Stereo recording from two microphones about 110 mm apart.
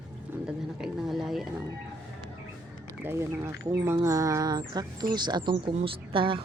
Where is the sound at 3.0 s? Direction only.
20° right (ahead or behind).